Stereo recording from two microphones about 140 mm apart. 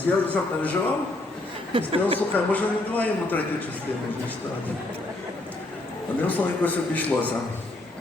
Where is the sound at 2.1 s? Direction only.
10° left (ahead or behind).